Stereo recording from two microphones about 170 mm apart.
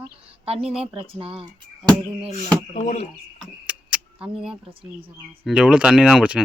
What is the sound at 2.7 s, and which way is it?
Speech, 45° left (ahead or behind).